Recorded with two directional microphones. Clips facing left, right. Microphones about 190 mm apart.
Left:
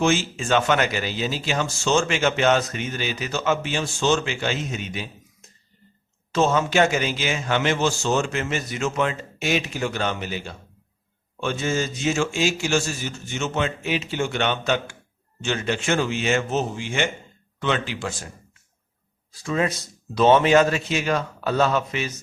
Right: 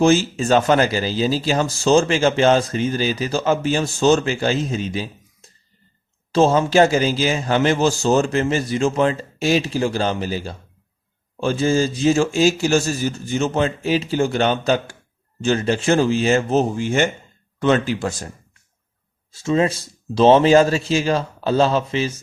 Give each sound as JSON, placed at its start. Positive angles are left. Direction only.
{"t": 0.0, "sound": "speech", "side_deg": -40}
{"t": 19.3, "sound": "a man's voice", "side_deg": -25}